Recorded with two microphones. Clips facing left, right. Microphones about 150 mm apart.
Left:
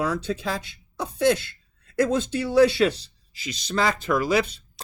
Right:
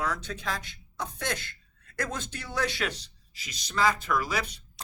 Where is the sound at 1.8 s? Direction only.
30° left (ahead or behind).